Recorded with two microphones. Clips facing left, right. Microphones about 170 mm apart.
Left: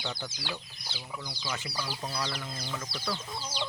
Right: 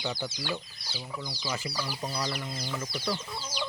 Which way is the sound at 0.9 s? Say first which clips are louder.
Right 3 dB; 10° right (ahead or behind).